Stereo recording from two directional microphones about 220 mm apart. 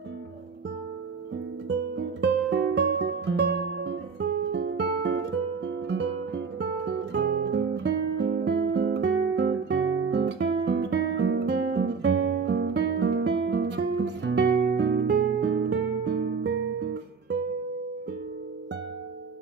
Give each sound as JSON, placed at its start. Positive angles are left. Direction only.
{"t": 2.0, "sound": "music", "side_deg": -50}